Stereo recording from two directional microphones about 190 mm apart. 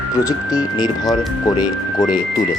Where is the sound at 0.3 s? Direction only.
20° left (ahead or behind).